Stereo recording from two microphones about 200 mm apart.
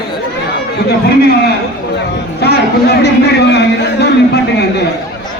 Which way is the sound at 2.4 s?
50° left (ahead or behind).